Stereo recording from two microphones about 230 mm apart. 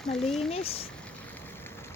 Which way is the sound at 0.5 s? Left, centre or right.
Left.